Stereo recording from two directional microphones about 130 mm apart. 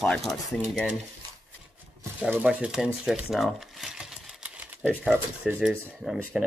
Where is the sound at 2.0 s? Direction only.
15° right (ahead or behind).